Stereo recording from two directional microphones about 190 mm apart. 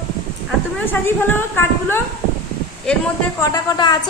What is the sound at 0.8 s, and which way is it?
A woman's voice, 10° left (ahead or behind).